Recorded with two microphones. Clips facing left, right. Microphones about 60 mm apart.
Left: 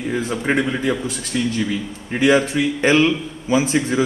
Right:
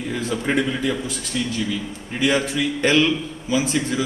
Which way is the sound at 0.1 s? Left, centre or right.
Left.